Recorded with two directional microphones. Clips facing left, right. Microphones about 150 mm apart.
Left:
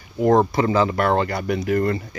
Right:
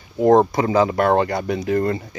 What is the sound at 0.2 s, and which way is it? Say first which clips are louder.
Speech: right 2 dB; 20° right (ahead or behind).